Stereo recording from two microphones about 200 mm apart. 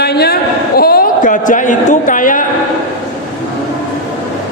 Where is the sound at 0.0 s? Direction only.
55° left (ahead or behind).